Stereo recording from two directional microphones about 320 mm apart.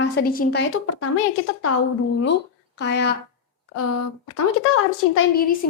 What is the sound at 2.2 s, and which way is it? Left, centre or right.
Speech, left.